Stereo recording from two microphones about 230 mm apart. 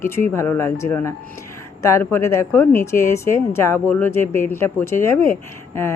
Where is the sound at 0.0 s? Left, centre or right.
Centre.